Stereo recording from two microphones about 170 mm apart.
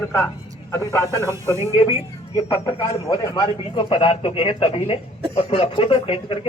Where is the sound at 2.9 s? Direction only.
20° left (ahead or behind).